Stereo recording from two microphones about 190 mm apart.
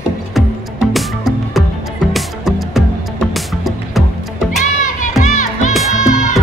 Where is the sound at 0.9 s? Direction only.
Centre (ahead or behind).